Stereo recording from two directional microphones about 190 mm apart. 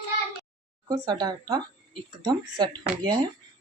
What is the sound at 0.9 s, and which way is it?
Speech, 20° right (ahead or behind).